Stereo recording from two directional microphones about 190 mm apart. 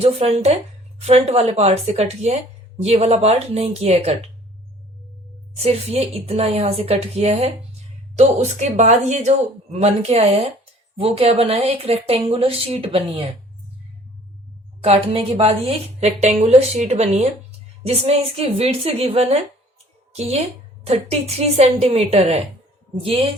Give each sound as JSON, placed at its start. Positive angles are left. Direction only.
{"t": 0.0, "sound": "a woman's voice", "side_deg": -35}
{"t": 5.5, "sound": "a woman's voice", "side_deg": -35}
{"t": 14.8, "sound": "a woman's voice", "side_deg": -30}